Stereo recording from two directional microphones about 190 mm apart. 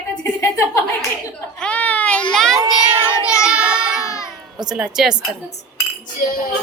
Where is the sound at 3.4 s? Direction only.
5° right (ahead or behind).